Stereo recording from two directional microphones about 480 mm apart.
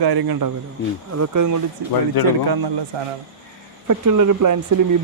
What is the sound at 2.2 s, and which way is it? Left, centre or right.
Speech, left.